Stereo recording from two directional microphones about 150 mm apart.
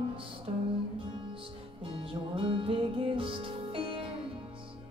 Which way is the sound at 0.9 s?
35° right (ahead or behind).